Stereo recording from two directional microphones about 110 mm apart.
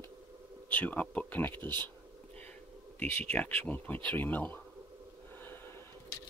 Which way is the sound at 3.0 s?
10° left (ahead or behind).